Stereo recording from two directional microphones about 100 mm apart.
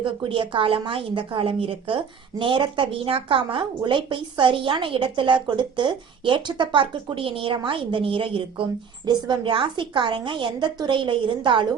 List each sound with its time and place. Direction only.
0.0 s a woman's voice: 55° right (ahead or behind)
9.0 s a woman's voice: 45° right (ahead or behind)